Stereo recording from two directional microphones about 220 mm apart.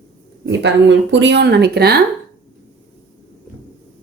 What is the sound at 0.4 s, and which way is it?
A woman's voice, 55° right (ahead or behind).